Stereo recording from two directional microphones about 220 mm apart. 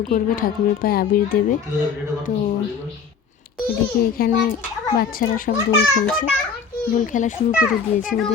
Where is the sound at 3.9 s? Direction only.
40° left (ahead or behind).